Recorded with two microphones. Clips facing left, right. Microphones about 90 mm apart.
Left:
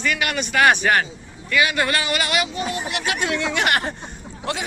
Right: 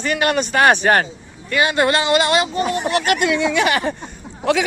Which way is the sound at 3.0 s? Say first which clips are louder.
Right 4 dB; 60° right (ahead or behind).